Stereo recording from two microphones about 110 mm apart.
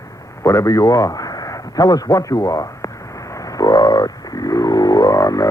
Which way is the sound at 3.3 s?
30° left (ahead or behind).